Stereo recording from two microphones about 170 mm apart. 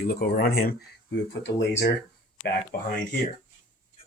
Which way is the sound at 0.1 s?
60° left (ahead or behind).